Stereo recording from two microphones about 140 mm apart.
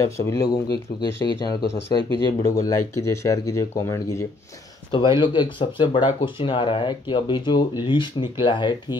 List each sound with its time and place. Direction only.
0.0 s speech: 20° left (ahead or behind)
4.9 s speech: 35° left (ahead or behind)